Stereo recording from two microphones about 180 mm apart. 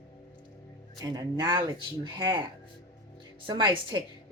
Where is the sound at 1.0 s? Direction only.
25° right (ahead or behind).